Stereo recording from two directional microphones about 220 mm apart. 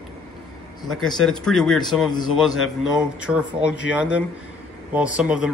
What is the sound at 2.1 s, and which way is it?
Speech, 20° left (ahead or behind).